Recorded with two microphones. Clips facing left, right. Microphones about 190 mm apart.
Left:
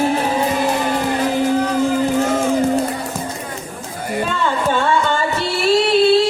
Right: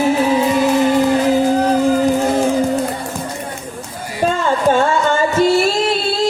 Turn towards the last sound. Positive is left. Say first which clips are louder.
# left 4 dB
turn(degrees=-40)  # may be behind; listen again after turning